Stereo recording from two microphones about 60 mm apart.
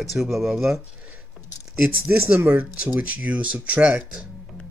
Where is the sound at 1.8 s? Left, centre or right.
Right.